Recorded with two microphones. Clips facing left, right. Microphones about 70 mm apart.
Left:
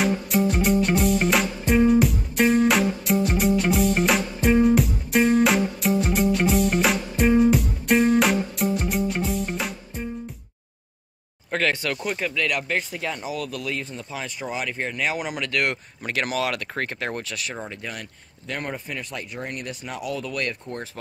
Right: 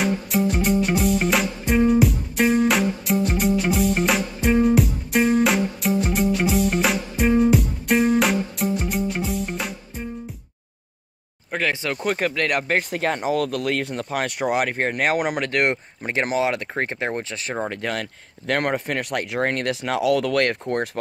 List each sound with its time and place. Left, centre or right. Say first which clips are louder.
0.0 s music: even; centre
11.5 s a sound: even; centre
12.0 s speech: right 4 dB; right
12.9 s speech: right 7 dB; right
15.7 s speech: right 3 dB; right
17.6 s speech: right 8 dB; right